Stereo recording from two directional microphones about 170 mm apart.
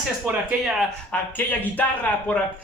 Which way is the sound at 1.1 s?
10° left (ahead or behind).